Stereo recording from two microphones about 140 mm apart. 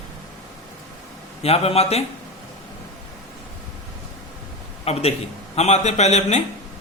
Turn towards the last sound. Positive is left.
turn(degrees=55)  # may be behind; listen again after turning